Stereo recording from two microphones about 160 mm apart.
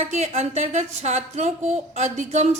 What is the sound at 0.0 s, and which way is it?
Speech, 45° right (ahead or behind).